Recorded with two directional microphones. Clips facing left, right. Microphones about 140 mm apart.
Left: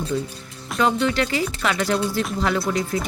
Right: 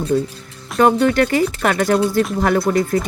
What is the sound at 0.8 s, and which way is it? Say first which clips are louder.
Speech: right 7 dB; 50° right (ahead or behind).